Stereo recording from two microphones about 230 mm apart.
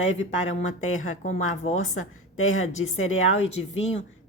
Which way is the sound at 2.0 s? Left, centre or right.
Left.